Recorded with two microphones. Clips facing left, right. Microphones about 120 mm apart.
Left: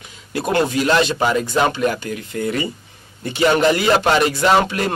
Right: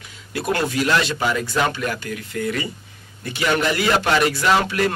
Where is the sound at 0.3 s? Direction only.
25° left (ahead or behind).